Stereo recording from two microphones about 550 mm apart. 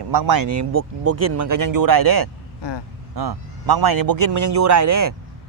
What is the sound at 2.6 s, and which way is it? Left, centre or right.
Speech, left.